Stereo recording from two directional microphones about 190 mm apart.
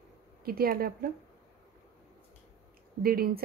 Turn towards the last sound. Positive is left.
turn(degrees=-50)  # may be behind; listen again after turning